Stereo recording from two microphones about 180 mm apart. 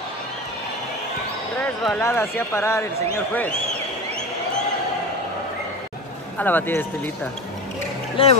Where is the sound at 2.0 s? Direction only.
15° left (ahead or behind).